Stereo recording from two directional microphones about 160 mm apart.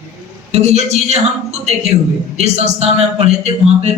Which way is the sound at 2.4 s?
45° right (ahead or behind).